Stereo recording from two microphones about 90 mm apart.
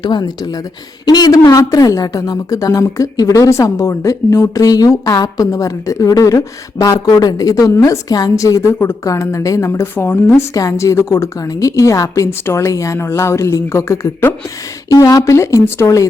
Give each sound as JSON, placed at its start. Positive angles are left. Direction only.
{"t": 0.0, "sound": "a woman's voice", "side_deg": 55}
{"t": 14.8, "sound": "a woman's voice", "side_deg": 40}